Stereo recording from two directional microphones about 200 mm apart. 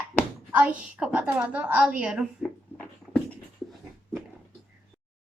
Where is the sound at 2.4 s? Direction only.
5° left (ahead or behind).